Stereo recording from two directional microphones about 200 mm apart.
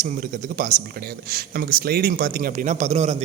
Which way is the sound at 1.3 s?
50° right (ahead or behind).